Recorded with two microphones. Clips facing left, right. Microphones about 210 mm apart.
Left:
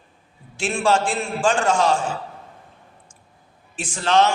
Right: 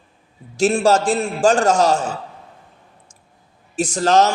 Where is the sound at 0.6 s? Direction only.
40° right (ahead or behind).